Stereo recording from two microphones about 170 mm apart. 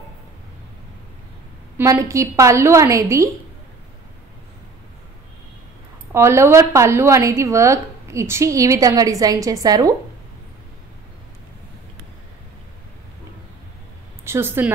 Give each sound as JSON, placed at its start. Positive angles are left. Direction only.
{"t": 1.8, "sound": "a woman's voice", "side_deg": -15}
{"t": 6.1, "sound": "a woman's voice", "side_deg": -15}
{"t": 14.2, "sound": "a woman's voice", "side_deg": -15}